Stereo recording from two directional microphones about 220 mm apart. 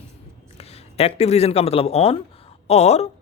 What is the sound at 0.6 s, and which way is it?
A woman's voice, 30° left (ahead or behind).